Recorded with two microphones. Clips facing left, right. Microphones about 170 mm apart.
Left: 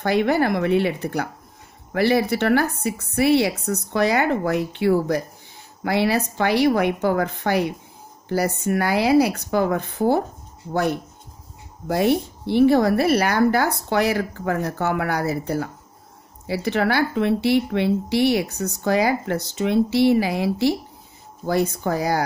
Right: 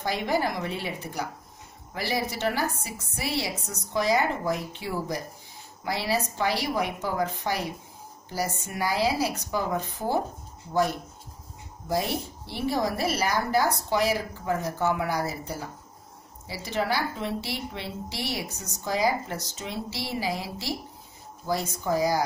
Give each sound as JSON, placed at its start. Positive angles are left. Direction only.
{"t": 0.0, "sound": "speech", "side_deg": 65}